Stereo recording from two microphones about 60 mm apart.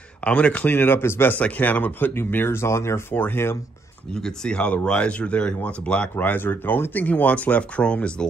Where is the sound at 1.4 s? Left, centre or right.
Left.